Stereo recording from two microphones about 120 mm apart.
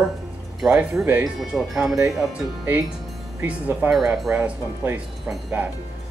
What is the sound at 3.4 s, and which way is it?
Speech, 10° right (ahead or behind).